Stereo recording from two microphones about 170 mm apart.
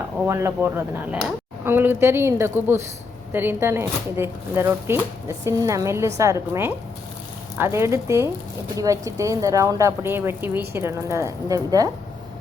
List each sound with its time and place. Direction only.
0.3 s speech: 15° right (ahead or behind)